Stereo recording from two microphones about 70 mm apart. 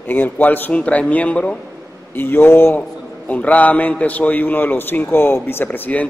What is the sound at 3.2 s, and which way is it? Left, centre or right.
A man's voice, left.